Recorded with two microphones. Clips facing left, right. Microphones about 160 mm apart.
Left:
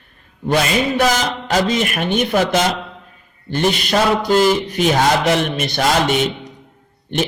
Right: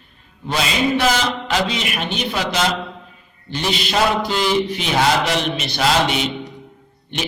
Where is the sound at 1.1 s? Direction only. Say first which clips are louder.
Left 2 dB; 45° left (ahead or behind).